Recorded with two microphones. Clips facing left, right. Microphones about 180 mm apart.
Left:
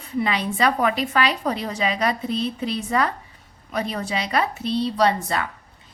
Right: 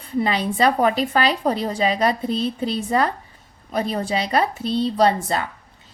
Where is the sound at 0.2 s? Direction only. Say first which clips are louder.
Right 2 dB; 35° right (ahead or behind).